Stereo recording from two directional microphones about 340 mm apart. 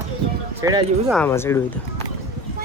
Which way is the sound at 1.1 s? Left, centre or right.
Centre.